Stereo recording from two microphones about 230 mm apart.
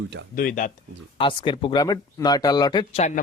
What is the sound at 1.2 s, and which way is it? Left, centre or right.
Speech, left.